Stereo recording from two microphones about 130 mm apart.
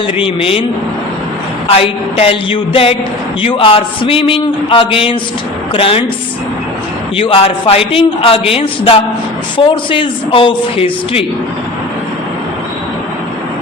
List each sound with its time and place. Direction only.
0.2 s speech: 45° left (ahead or behind)
1.6 s speech: 50° left (ahead or behind)
7.2 s speech: 45° left (ahead or behind)